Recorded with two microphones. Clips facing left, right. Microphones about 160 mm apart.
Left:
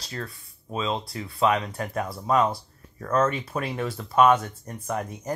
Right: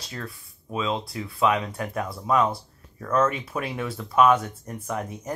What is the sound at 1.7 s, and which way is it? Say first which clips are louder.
Speech: even; 25° left (ahead or behind).